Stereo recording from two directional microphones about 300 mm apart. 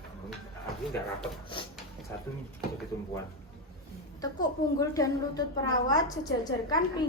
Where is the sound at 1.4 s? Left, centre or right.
Centre.